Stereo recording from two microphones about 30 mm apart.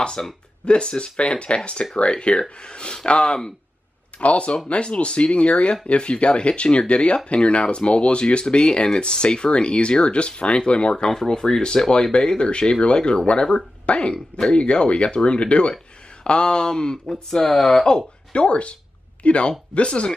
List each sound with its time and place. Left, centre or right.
0.2 s speech: left
11.1 s speech: centre
17.1 s speech: centre
17.8 s speech: left